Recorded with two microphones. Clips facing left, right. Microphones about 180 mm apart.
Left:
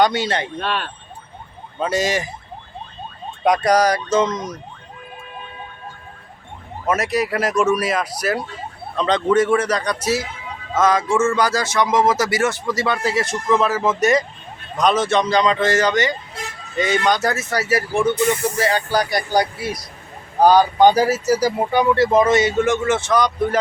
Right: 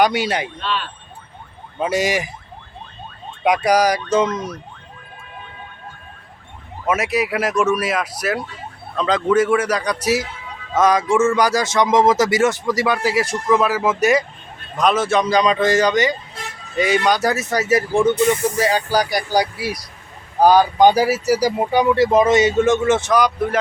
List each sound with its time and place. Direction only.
0.0 s speech: 15° right (ahead or behind)
0.6 s speech: 50° left (ahead or behind)
1.8 s speech: 15° right (ahead or behind)
3.4 s speech: 10° right (ahead or behind)
6.8 s speech: 5° right (ahead or behind)